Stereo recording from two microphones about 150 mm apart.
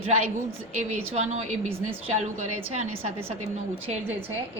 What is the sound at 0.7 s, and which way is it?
A woman's voice, 50° right (ahead or behind).